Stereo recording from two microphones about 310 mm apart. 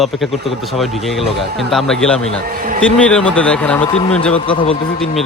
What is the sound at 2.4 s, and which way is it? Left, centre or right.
Speech, right.